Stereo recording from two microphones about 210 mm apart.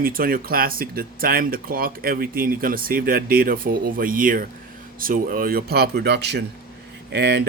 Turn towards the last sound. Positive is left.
turn(degrees=-55)  # may be behind; listen again after turning